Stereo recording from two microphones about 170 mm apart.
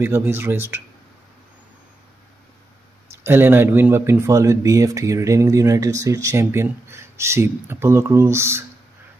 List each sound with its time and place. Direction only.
0.0 s speech: 15° right (ahead or behind)
3.3 s speech: 15° right (ahead or behind)